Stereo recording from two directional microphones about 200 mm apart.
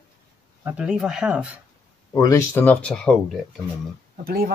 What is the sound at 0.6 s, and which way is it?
Speech, 5° right (ahead or behind).